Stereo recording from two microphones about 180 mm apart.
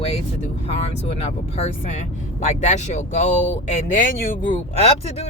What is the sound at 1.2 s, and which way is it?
Speech, 35° left (ahead or behind).